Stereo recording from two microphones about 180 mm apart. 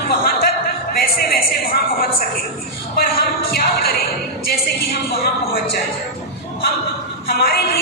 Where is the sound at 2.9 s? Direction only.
55° left (ahead or behind).